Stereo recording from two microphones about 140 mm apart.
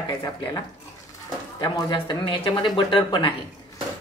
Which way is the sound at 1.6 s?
30° left (ahead or behind).